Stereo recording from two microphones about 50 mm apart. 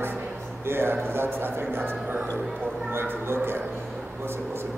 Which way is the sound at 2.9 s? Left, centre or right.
Right.